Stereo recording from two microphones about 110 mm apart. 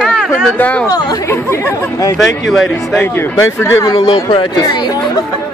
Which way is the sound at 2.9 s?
20° left (ahead or behind).